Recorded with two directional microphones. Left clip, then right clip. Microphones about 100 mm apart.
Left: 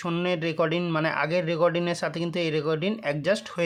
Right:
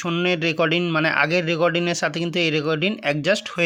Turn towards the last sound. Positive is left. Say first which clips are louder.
# right 5 dB
turn(degrees=-25)  # may be behind; listen again after turning